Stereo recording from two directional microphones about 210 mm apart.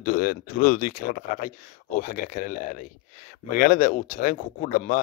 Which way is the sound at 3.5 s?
40° left (ahead or behind).